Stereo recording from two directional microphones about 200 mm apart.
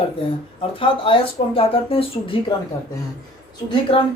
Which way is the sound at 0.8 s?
25° left (ahead or behind).